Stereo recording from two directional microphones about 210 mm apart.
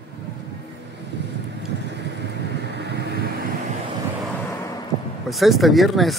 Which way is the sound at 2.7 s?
55° right (ahead or behind).